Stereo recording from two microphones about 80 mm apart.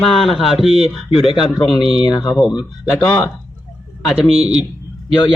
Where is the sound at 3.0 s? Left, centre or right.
Centre.